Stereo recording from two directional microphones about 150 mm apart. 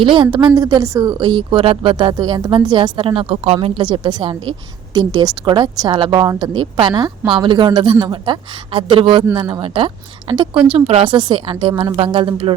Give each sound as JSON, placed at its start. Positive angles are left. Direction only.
{"t": 0.0, "sound": "speech", "side_deg": -35}